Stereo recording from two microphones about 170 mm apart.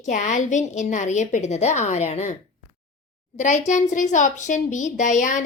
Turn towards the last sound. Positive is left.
turn(degrees=45)  # may be behind; listen again after turning